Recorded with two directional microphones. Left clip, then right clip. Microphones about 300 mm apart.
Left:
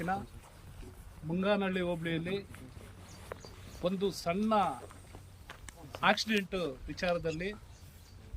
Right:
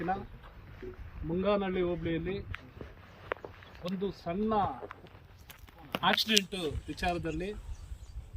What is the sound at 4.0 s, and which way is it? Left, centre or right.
Speech, centre.